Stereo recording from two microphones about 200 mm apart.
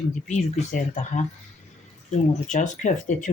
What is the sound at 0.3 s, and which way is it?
Speech, 35° left (ahead or behind).